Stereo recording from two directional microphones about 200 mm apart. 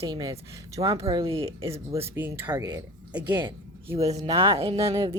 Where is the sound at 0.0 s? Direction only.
20° right (ahead or behind).